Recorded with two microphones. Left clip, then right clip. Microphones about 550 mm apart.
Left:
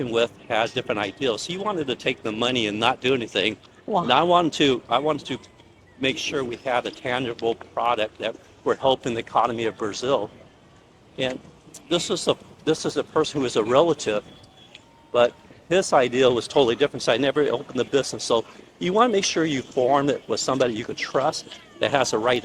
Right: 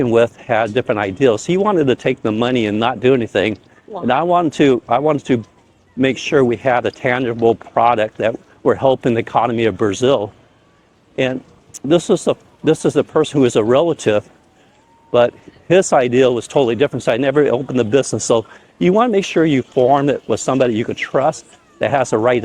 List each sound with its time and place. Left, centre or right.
0.0 s speech: right
6.0 s speech: right
11.9 s speech: right
13.2 s speech: right
15.7 s speech: right